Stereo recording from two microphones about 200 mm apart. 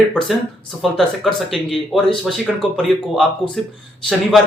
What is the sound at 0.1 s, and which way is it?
Speech, 5° left (ahead or behind).